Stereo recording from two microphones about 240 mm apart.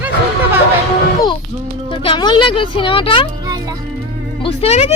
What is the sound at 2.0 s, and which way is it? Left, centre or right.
A woman's voice, left.